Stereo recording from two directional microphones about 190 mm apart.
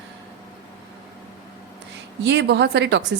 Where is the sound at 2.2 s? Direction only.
65° right (ahead or behind).